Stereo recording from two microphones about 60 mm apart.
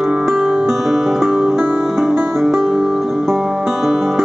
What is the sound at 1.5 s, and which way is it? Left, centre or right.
Music, centre.